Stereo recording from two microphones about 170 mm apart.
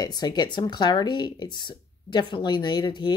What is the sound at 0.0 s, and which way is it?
Speech, 25° left (ahead or behind).